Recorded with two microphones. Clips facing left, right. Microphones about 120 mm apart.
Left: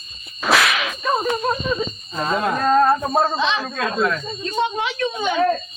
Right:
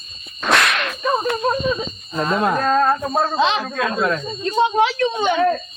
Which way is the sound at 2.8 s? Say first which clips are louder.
Left 1 dB; 15° left (ahead or behind).